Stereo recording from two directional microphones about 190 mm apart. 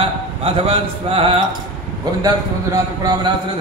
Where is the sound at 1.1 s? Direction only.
30° right (ahead or behind).